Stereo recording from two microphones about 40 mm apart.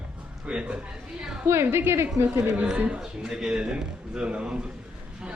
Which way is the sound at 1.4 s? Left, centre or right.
Right.